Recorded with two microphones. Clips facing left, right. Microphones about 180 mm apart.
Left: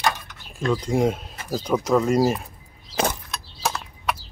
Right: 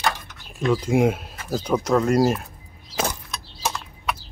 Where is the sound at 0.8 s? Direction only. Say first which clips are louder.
Right 2 dB; 5° right (ahead or behind).